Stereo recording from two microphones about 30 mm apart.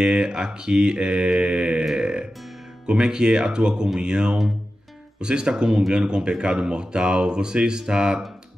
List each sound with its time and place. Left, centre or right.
0.0 s speech: right